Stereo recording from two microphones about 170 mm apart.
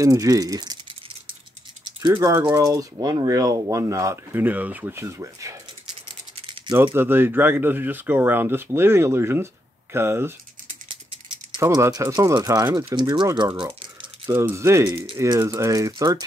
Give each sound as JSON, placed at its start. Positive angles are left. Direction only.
{"t": 0.0, "sound": "speech", "side_deg": -20}
{"t": 6.0, "sound": "rattle", "side_deg": -30}
{"t": 6.8, "sound": "speech", "side_deg": -15}
{"t": 11.5, "sound": "speech", "side_deg": -20}
{"t": 14.3, "sound": "speech", "side_deg": -15}